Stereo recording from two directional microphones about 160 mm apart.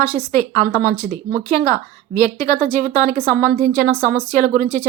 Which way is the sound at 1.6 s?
20° left (ahead or behind).